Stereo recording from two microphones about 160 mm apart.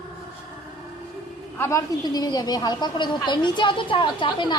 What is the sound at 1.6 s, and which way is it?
A woman's voice, 20° left (ahead or behind).